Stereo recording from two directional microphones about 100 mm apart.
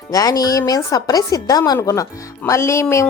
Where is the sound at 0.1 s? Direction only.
40° left (ahead or behind).